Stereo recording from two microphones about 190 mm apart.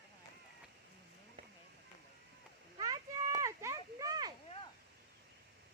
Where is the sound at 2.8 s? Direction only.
20° right (ahead or behind).